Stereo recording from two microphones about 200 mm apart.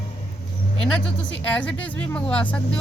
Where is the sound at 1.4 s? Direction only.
5° left (ahead or behind).